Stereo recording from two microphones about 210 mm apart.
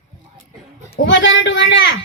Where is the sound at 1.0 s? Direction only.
60° left (ahead or behind).